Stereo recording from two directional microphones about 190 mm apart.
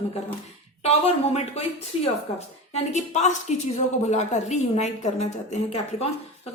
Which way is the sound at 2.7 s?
35° left (ahead or behind).